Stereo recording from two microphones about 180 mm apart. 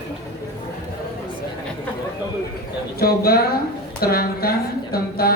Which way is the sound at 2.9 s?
60° left (ahead or behind).